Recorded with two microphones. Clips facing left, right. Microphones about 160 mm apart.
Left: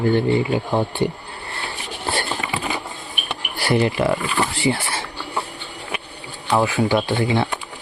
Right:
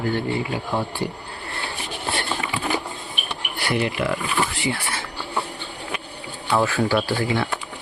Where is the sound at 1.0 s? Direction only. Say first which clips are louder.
Left 6 dB; 20° left (ahead or behind).